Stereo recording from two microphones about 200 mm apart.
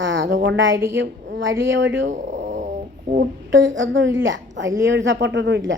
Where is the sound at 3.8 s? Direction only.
70° right (ahead or behind).